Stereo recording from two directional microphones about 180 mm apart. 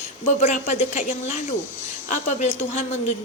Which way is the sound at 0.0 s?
40° left (ahead or behind).